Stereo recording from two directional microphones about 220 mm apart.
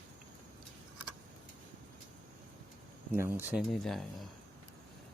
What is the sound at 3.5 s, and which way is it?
Speech, centre (ahead or behind).